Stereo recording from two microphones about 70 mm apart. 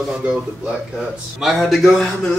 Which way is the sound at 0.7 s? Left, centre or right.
Centre.